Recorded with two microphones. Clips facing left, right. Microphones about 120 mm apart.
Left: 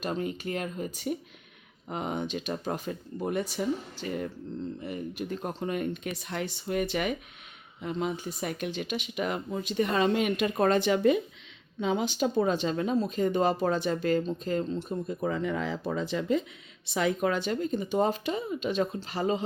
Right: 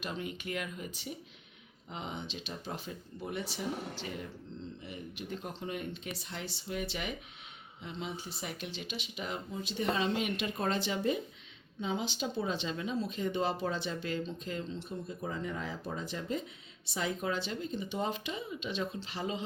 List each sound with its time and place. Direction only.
0.0 s speech: 40° left (ahead or behind)
1.9 s speech: 50° left (ahead or behind)
15.2 s speech: 75° left (ahead or behind); by 16.4 s 90° left
16.9 s speech: 70° left (ahead or behind); by 19.5 s 45° left (ahead or behind)